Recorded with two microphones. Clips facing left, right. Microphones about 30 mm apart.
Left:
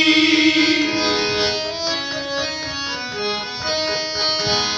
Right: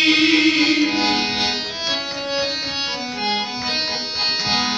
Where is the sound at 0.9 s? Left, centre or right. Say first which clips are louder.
Even; right.